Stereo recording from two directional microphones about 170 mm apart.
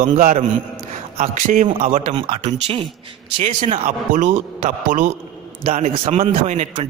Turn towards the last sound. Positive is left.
turn(degrees=-40)  # may be behind; listen again after turning